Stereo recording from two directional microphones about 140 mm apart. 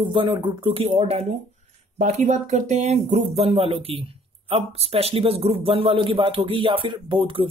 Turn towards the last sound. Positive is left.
turn(degrees=-40)  # may be behind; listen again after turning